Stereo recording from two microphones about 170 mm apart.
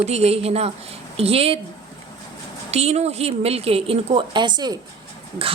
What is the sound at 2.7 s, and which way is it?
A woman's voice, 40° right (ahead or behind).